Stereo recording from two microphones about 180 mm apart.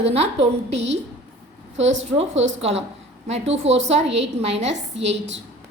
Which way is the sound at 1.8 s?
90° right.